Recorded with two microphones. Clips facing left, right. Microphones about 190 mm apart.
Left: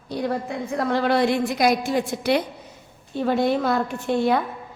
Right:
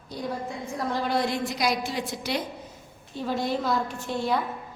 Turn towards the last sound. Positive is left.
turn(degrees=60)  # may be behind; listen again after turning